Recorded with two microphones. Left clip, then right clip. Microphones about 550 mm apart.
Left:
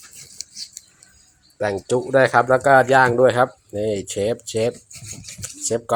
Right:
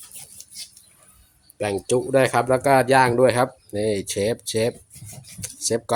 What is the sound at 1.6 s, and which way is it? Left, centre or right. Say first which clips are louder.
Speech: left 1 dB; right.